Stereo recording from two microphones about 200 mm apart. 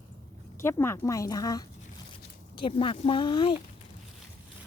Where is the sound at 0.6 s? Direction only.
15° left (ahead or behind).